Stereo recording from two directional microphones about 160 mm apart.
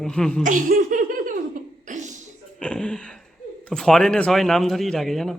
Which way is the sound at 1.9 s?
50° right (ahead or behind).